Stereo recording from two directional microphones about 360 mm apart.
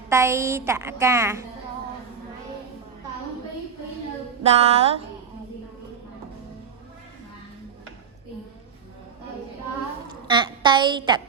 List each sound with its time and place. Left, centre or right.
0.1 s a woman's voice: centre
4.4 s a woman's voice: centre
10.1 s a woman's voice: centre